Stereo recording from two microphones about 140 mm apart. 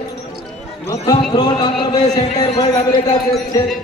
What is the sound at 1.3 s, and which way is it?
Speech, 30° left (ahead or behind).